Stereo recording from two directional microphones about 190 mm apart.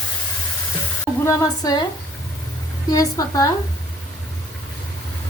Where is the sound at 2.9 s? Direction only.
20° left (ahead or behind).